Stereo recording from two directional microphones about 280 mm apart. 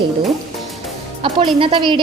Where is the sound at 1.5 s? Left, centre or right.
Centre.